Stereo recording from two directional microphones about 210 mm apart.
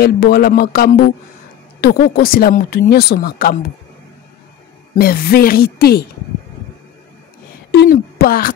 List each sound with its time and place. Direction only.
0.0 s speech: 45° left (ahead or behind)
4.9 s speech: 45° left (ahead or behind)
7.7 s speech: 50° left (ahead or behind)